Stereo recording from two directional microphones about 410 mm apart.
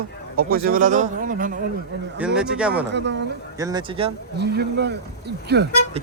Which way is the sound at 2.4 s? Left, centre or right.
Centre.